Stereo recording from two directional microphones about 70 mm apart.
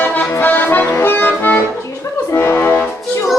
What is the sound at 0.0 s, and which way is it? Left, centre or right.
Accordion, left.